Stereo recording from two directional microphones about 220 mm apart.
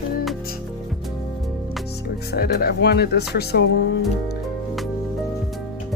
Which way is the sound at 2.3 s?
45° left (ahead or behind).